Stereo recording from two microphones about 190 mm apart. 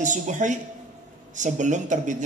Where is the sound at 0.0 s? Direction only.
40° right (ahead or behind).